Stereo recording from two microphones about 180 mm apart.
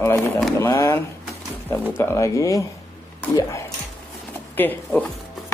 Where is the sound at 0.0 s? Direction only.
15° left (ahead or behind).